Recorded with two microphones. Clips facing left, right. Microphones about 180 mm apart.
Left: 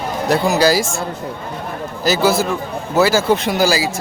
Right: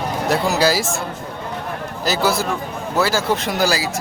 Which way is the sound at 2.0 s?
Centre (ahead or behind).